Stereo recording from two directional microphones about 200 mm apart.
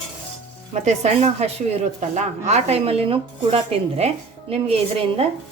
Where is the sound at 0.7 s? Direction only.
35° right (ahead or behind).